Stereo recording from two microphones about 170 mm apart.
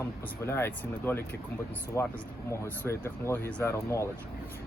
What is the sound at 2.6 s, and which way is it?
Speech, 10° left (ahead or behind).